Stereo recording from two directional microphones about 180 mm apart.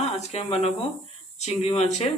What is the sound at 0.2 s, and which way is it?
Speech, 35° left (ahead or behind).